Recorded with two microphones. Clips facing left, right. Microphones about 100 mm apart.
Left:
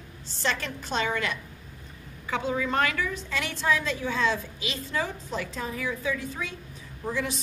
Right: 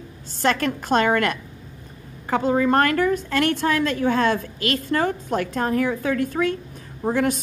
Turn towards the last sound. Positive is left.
turn(degrees=-55)  # may be behind; listen again after turning